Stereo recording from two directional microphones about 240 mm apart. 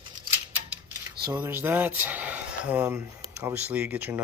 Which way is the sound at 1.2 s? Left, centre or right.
Centre.